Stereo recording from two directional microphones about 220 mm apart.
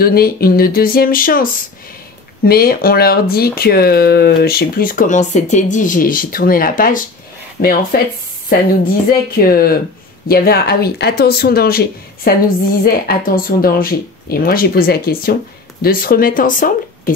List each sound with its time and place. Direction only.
0.0 s speech: 45° left (ahead or behind)
9.3 s speech: 40° left (ahead or behind)